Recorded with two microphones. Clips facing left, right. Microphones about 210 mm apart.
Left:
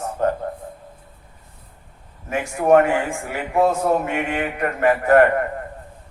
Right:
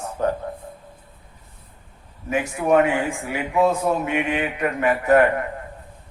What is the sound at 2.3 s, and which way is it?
Speech, 50° left (ahead or behind).